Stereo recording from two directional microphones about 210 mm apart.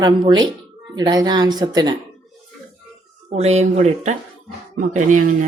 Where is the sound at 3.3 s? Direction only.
30° right (ahead or behind).